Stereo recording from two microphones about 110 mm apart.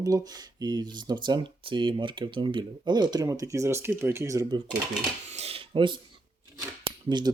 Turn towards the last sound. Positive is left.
turn(degrees=-45)  # may be behind; listen again after turning